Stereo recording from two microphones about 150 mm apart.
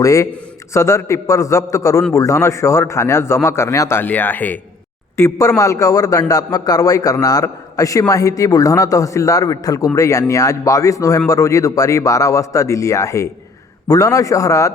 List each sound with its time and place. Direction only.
0.0 s a man's voice: 20° left (ahead or behind)